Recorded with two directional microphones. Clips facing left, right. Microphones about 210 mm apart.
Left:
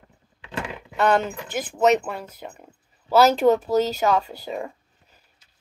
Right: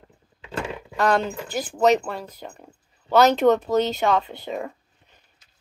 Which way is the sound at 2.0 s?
10° left (ahead or behind).